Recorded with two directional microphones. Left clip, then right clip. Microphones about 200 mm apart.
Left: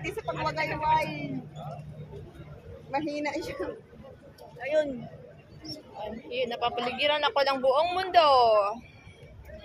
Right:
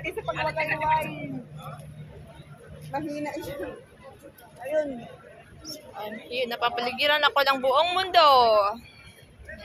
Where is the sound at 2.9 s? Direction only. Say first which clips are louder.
Left 1 dB; 20° right (ahead or behind).